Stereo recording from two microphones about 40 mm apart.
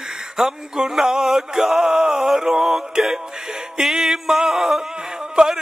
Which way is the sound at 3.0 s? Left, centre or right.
Centre.